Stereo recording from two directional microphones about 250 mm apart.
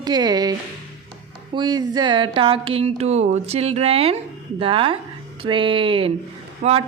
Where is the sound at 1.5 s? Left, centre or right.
Centre.